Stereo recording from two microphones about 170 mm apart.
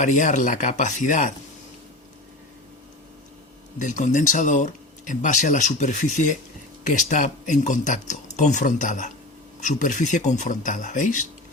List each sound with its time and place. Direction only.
0.0 s speech: 45° left (ahead or behind)
3.8 s speech: 50° left (ahead or behind)